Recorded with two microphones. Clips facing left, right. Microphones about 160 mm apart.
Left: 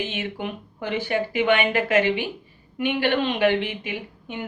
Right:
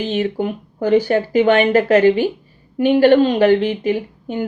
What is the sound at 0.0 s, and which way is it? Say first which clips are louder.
A woman's voice: right 9 dB; 40° right (ahead or behind).